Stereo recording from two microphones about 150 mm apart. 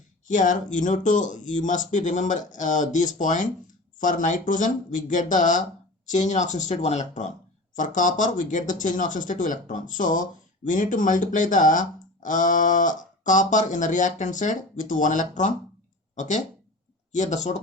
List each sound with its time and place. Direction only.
0.3 s speech: 55° left (ahead or behind)